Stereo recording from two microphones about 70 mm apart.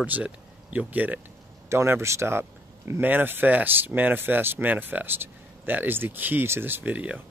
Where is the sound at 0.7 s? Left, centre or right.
Right.